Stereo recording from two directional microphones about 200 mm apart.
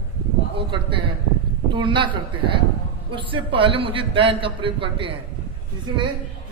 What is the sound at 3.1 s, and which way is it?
Speech, 25° right (ahead or behind).